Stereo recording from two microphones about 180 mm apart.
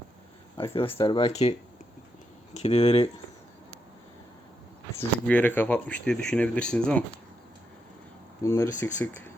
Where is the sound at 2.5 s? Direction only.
35° left (ahead or behind).